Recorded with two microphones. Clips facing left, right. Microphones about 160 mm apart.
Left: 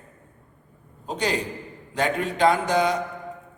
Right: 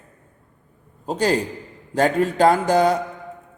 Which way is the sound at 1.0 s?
40° right (ahead or behind).